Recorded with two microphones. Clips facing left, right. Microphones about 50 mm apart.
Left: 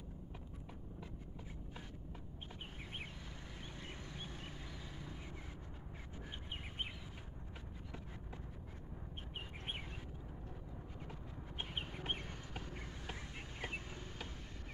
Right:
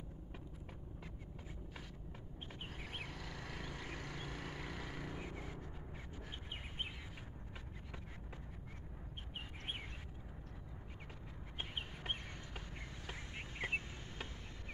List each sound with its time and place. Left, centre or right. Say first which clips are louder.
3.0 s vehicle: right 3 dB; right
12.0 s a sound: left 1 dB; centre
13.6 s vehicle: right 5 dB; right